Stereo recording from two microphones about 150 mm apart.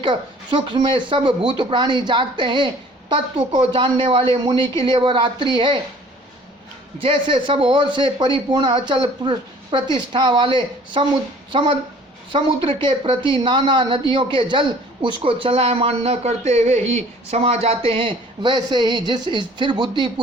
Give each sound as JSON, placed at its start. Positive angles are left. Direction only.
{"t": 0.0, "sound": "speech", "side_deg": -35}
{"t": 7.0, "sound": "speech", "side_deg": -35}
{"t": 12.3, "sound": "speech", "side_deg": -35}